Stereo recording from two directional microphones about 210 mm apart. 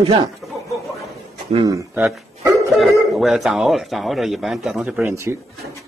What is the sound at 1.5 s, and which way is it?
Speech, 25° right (ahead or behind).